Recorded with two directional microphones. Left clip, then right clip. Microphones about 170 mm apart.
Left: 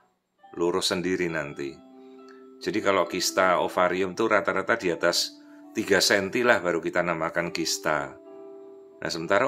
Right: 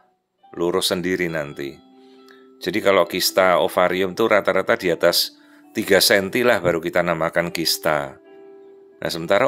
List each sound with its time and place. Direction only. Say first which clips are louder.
0.6 s speech: right 5 dB; 35° right (ahead or behind)